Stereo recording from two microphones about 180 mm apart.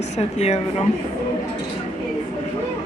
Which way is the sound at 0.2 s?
35° left (ahead or behind).